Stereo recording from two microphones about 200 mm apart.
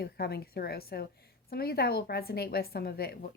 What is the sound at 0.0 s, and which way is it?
A woman's voice, 50° left (ahead or behind).